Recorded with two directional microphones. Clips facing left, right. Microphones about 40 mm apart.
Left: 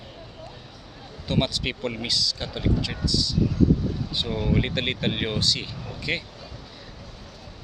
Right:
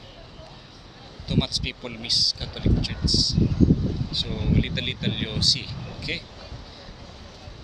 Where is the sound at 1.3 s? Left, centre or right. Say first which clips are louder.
Left 2 dB; centre.